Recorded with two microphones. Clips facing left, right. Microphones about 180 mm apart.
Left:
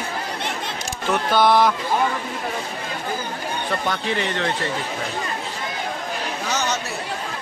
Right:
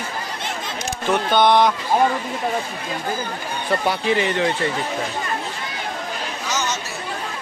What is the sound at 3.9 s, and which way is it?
Speech, 10° right (ahead or behind).